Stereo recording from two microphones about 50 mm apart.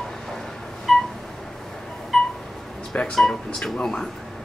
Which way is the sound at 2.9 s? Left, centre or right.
Centre.